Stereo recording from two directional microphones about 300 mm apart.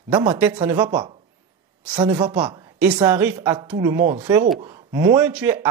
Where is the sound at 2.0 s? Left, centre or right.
Centre.